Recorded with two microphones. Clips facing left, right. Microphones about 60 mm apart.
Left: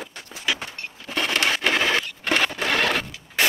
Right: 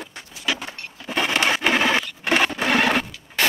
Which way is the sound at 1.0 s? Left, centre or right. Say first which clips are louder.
Right 2 dB; centre.